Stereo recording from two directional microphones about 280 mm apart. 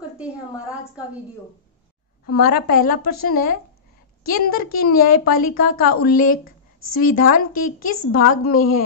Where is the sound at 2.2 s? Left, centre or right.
Left.